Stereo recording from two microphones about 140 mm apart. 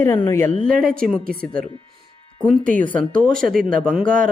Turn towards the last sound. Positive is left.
turn(degrees=5)  # may be behind; listen again after turning